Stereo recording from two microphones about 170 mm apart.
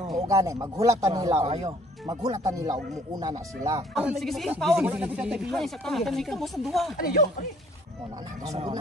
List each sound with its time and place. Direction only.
0.1 s speech: 20° right (ahead or behind)
1.3 s speech: 40° right (ahead or behind)
2.0 s speech: 20° right (ahead or behind)
3.9 s speech: centre (ahead or behind)
8.5 s speech: 35° right (ahead or behind)